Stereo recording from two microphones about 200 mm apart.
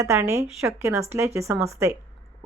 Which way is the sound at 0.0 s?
15° right (ahead or behind).